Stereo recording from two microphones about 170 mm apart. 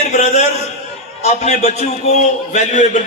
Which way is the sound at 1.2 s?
40° left (ahead or behind).